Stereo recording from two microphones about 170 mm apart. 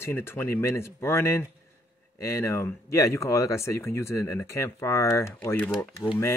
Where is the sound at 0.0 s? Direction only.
15° left (ahead or behind).